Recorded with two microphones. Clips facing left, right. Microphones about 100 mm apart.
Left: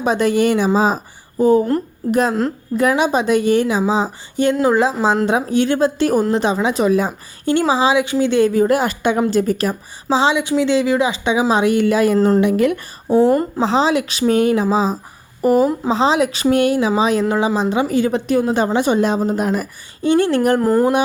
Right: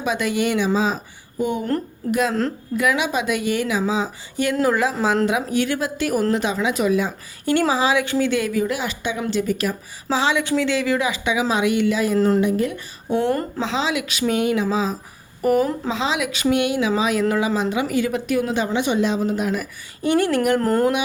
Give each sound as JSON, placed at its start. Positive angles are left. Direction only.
{"t": 0.0, "sound": "a woman's voice", "side_deg": 35}
{"t": 7.7, "sound": "a woman's voice", "side_deg": 20}
{"t": 10.1, "sound": "a woman's voice", "side_deg": 20}
{"t": 12.4, "sound": "speech", "side_deg": 75}
{"t": 13.1, "sound": "a woman's voice", "side_deg": 35}
{"t": 20.0, "sound": "a woman's voice", "side_deg": 25}
{"t": 20.6, "sound": "speech", "side_deg": 10}